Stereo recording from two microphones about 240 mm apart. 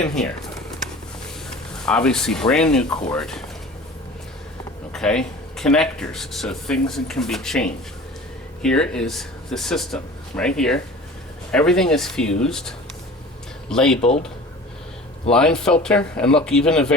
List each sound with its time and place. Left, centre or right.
0.0 s speech: centre
1.7 s speech: centre
4.9 s speech: centre
8.6 s speech: centre
14.0 s speech: left
15.3 s speech: centre